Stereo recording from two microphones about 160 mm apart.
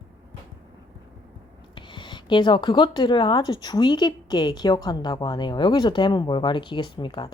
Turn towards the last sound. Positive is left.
turn(degrees=30)  # may be behind; listen again after turning